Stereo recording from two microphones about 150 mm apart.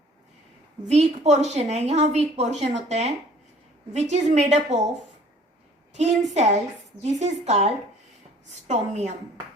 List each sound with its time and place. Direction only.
0.9 s a woman's voice: 50° right (ahead or behind)
5.9 s a woman's voice: 50° right (ahead or behind)